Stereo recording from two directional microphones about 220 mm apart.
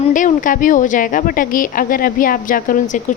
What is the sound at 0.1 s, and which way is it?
A woman's voice, 35° left (ahead or behind).